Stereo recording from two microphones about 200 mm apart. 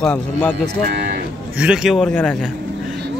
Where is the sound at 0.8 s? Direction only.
55° right (ahead or behind).